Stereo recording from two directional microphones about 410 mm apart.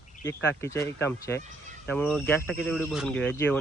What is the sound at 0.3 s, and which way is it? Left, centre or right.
Speech, centre.